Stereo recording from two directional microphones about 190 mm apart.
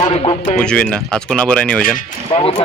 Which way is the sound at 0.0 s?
30° left (ahead or behind).